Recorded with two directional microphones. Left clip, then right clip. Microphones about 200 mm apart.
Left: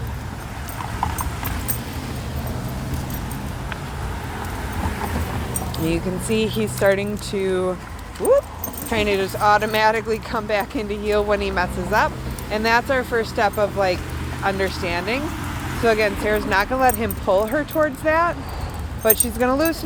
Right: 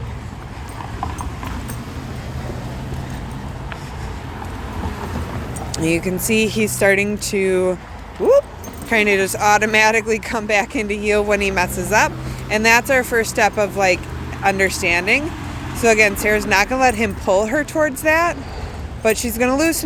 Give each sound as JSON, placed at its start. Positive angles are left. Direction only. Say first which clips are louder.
{"t": 5.7, "sound": "speech", "louder": "right 5 dB", "side_deg": -40}